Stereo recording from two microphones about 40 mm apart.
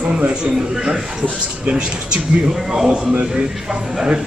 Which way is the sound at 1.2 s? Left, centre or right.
Right.